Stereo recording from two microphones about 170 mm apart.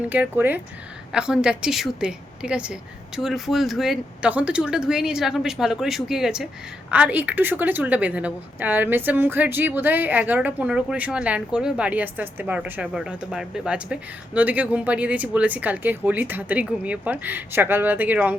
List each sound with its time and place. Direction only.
0.1 s a woman's voice: 10° right (ahead or behind)